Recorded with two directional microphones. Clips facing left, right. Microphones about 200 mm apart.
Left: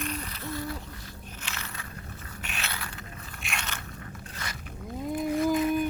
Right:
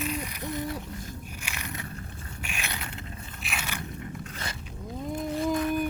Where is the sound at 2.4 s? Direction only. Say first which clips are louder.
Right 1 dB; 10° right (ahead or behind).